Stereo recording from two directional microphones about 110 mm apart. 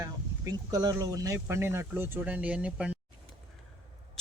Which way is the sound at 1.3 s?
20° right (ahead or behind).